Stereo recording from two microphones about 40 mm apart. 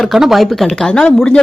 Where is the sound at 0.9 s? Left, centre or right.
Left.